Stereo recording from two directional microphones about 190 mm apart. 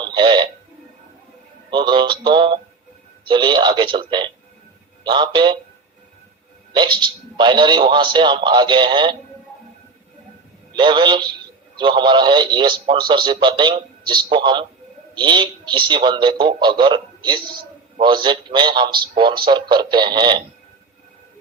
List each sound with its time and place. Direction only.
0.0 s a sound: 25° right (ahead or behind)
1.7 s a man's voice: 25° right (ahead or behind)
6.7 s a man's voice: 25° right (ahead or behind)
10.8 s a man's voice: 25° right (ahead or behind)